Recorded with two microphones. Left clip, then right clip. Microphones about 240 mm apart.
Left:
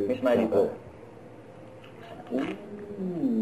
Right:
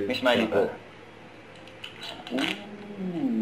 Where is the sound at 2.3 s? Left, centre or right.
Centre.